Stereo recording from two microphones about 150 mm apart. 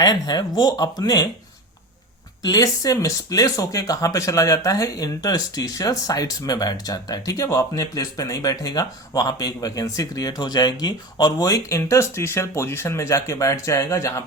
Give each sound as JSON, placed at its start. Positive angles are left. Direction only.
{"t": 0.0, "sound": "speech", "side_deg": 25}
{"t": 2.4, "sound": "speech", "side_deg": 25}